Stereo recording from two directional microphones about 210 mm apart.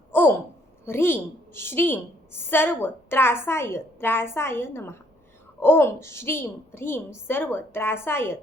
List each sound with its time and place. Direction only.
0.9 s a woman's voice: 10° left (ahead or behind)